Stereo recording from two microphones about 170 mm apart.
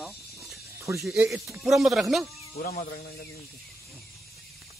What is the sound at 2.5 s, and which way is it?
Speech, 60° left (ahead or behind).